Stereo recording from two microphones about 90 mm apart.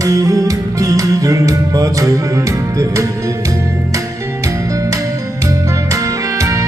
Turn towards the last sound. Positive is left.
turn(degrees=-35)  # may be behind; listen again after turning